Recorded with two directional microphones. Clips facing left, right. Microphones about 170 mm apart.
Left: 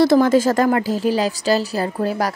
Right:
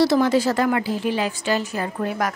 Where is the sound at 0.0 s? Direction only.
50° left (ahead or behind).